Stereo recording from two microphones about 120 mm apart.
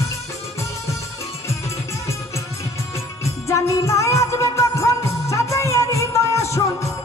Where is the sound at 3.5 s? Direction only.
25° left (ahead or behind).